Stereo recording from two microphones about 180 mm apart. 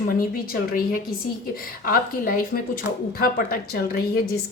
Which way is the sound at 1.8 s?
50° left (ahead or behind).